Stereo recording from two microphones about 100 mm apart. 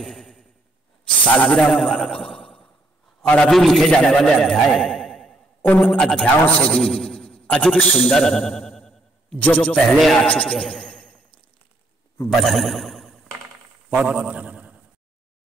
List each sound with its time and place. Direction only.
0.0 s a sound: 5° left (ahead or behind)
1.3 s a man's voice: 10° left (ahead or behind)
6.8 s a man's voice: 5° left (ahead or behind)
9.4 s speech: 15° left (ahead or behind)
9.9 s speech: centre (ahead or behind)
10.2 s speech: 15° left (ahead or behind)
10.5 s a sound: 5° left (ahead or behind)
12.3 s speech: centre (ahead or behind)
13.8 s a man's voice: 10° right (ahead or behind)